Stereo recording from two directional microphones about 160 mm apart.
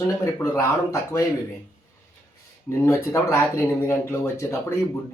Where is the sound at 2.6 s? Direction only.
15° left (ahead or behind).